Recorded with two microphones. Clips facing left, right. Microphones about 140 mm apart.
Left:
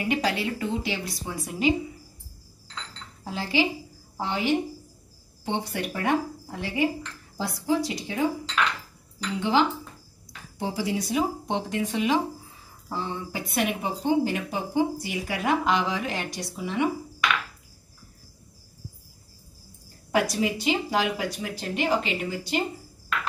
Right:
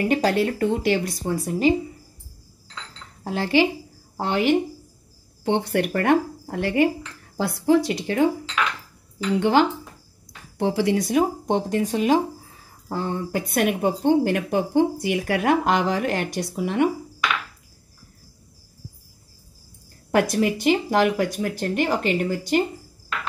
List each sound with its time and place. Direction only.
0.1 s speech: 50° right (ahead or behind)
3.3 s speech: 60° right (ahead or behind)
9.4 s speech: 60° right (ahead or behind)
20.1 s speech: 55° right (ahead or behind)